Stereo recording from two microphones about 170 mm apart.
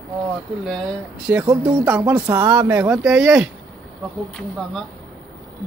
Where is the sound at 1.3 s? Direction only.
10° right (ahead or behind).